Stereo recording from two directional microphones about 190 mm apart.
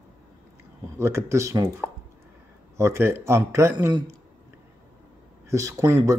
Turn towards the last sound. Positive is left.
turn(degrees=-15)  # may be behind; listen again after turning